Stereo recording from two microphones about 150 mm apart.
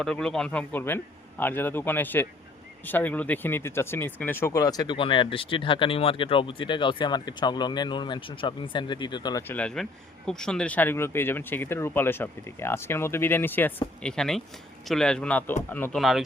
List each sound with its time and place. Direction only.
0.0 s speech: 5° left (ahead or behind); by 9.4 s 30° left (ahead or behind)
9.5 s a man's voice: 5° left (ahead or behind)